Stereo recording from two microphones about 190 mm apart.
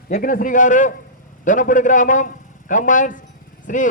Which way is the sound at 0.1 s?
45° left (ahead or behind).